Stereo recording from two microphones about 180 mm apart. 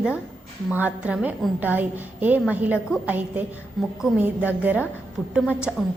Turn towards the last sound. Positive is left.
turn(degrees=-5)  # may be behind; listen again after turning